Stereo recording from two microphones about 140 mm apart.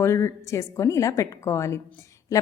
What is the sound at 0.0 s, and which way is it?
A woman's voice, 20° left (ahead or behind).